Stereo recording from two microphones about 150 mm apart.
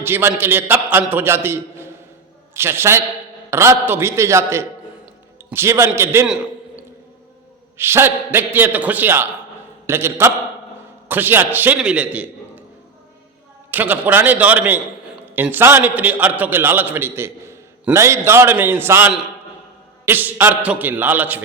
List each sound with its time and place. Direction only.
0.0 s a man's voice: 15° right (ahead or behind)
7.8 s a man's voice: 15° right (ahead or behind)
13.7 s a man's voice: 10° right (ahead or behind)